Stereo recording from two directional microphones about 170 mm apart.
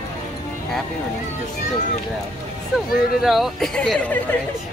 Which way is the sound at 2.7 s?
Centre (ahead or behind).